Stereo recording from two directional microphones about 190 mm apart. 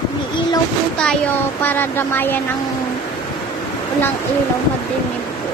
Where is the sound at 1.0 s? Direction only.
5° left (ahead or behind).